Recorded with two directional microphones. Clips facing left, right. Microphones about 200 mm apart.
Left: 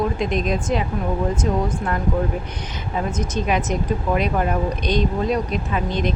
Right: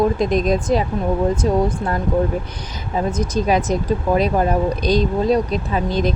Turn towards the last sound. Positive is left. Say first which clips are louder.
# right 3 dB
turn(degrees=-35)  # may be behind; listen again after turning